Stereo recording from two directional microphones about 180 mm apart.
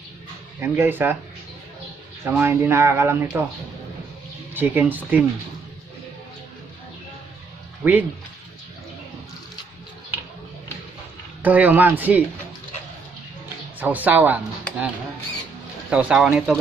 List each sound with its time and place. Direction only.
0.6 s speech: 10° right (ahead or behind)
2.2 s speech: 10° right (ahead or behind)
4.6 s speech: 10° right (ahead or behind)
7.8 s speech: 10° right (ahead or behind)
11.4 s speech: 10° right (ahead or behind)
13.7 s speech: 10° right (ahead or behind)
15.9 s speech: 5° right (ahead or behind)